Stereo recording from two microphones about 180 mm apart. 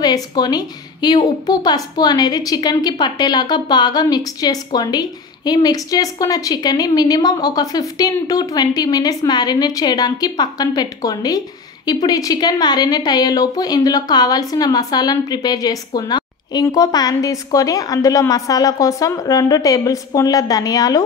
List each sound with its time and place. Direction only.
0.0 s a woman's voice: 20° left (ahead or behind)